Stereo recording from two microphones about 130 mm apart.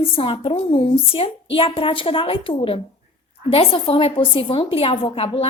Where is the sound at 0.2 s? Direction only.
45° left (ahead or behind).